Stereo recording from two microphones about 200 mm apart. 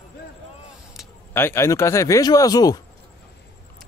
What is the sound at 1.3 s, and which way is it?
Speech, 10° left (ahead or behind).